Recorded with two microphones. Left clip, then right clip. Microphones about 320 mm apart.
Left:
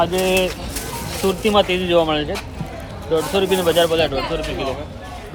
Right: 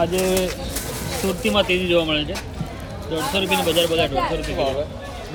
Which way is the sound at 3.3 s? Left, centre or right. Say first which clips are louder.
Left 2 dB; centre.